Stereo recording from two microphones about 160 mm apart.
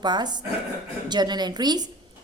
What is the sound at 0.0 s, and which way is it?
A woman's voice, 25° right (ahead or behind).